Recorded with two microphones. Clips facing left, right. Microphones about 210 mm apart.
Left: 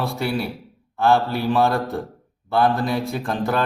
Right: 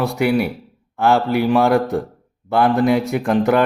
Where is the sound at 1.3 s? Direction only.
15° right (ahead or behind).